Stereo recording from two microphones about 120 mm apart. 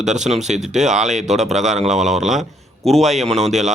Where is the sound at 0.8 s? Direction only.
5° right (ahead or behind).